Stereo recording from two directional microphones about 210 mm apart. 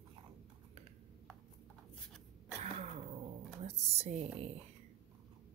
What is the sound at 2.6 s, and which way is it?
Throat clearing, 30° right (ahead or behind).